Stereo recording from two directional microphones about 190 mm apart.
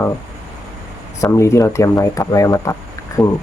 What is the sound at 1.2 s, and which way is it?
Speech, 15° left (ahead or behind).